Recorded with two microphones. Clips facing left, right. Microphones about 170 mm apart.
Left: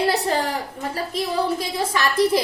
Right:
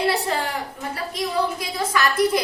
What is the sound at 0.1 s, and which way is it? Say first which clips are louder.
A woman's voice: left 2 dB; 35° left (ahead or behind).